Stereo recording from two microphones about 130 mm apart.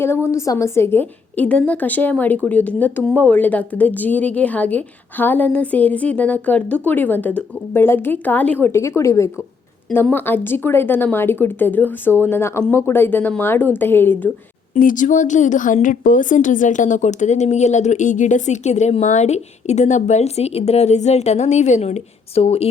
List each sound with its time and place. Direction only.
0.0 s a woman's voice: 20° left (ahead or behind)
14.8 s speech: 85° left; by 22.7 s 50° left (ahead or behind)